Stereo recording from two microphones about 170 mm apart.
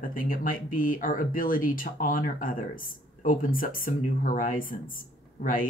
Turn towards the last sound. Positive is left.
turn(degrees=55)  # may be behind; listen again after turning